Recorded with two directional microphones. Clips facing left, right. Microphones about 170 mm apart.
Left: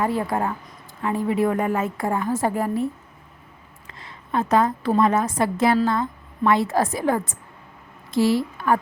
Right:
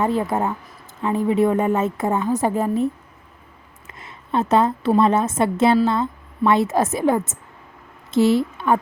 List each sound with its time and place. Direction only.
0.0 s a woman's voice: 20° right (ahead or behind)
3.8 s a sound: 20° right (ahead or behind)
4.9 s a woman's voice: 25° right (ahead or behind)